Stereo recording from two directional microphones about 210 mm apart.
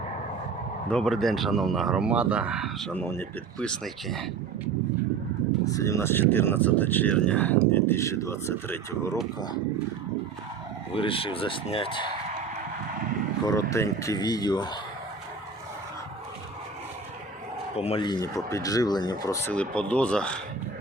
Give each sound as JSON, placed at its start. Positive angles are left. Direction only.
{"t": 0.9, "sound": "speech", "side_deg": 5}
{"t": 2.9, "sound": "speech", "side_deg": 10}
{"t": 5.6, "sound": "speech", "side_deg": 15}
{"t": 10.9, "sound": "speech", "side_deg": 25}
{"t": 13.4, "sound": "speech", "side_deg": 15}
{"t": 17.7, "sound": "speech", "side_deg": 25}